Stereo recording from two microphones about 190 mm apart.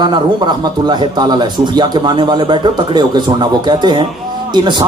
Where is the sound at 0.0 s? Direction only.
25° right (ahead or behind).